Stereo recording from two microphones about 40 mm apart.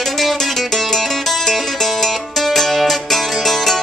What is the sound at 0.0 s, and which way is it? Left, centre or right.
Music, centre.